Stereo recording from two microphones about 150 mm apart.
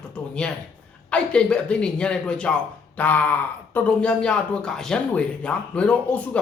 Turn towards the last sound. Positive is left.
turn(degrees=10)  # may be behind; listen again after turning